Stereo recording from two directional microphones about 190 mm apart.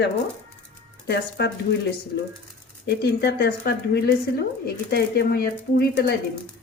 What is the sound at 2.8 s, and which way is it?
Speech, 60° left (ahead or behind).